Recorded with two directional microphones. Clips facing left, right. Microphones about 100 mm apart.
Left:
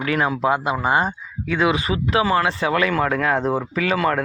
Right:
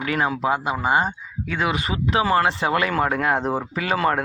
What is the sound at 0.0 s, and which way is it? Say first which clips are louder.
Speech: left 2 dB; 30° right (ahead or behind).